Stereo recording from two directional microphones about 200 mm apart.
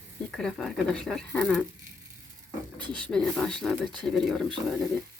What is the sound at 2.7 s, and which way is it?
Speech, 25° right (ahead or behind).